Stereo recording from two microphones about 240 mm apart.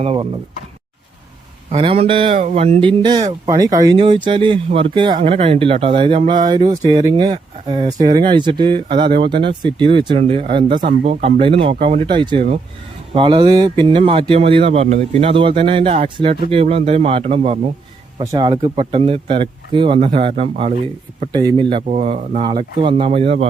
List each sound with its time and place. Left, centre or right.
0.0 s speech: right
1.7 s speech: right